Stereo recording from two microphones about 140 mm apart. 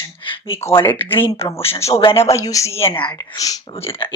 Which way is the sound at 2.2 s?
25° left (ahead or behind).